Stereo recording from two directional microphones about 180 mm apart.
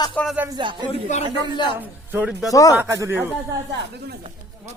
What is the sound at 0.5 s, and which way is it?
Speech, 25° right (ahead or behind).